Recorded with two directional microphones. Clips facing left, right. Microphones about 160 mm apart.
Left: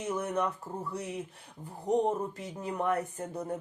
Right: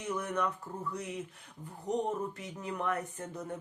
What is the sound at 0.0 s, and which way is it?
Speech, 30° left (ahead or behind).